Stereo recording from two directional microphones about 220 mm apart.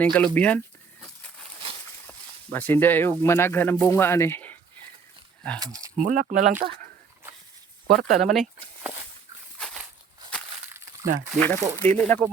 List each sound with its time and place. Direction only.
0.0 s speech: 5° left (ahead or behind)
2.5 s speech: 10° left (ahead or behind)
5.5 s speech: 15° right (ahead or behind)
6.0 s speech: 40° right (ahead or behind)
7.9 s speech: centre (ahead or behind)
9.6 s a sound: 5° left (ahead or behind)
10.7 s crumpling: 10° right (ahead or behind)
11.0 s speech: 35° right (ahead or behind)
11.3 s speech: 5° left (ahead or behind)